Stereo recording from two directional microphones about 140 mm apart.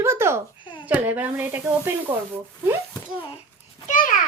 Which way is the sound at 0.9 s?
10° right (ahead or behind).